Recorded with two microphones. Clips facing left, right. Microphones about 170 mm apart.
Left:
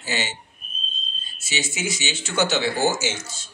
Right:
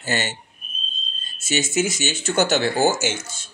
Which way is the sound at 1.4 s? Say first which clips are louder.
Right 7 dB; 45° right (ahead or behind).